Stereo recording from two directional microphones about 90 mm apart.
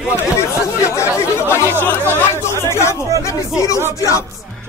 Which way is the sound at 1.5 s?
25° left (ahead or behind).